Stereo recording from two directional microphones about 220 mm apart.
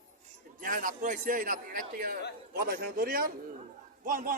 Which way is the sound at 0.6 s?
40° right (ahead or behind).